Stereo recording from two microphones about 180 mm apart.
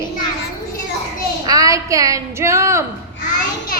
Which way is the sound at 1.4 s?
20° right (ahead or behind).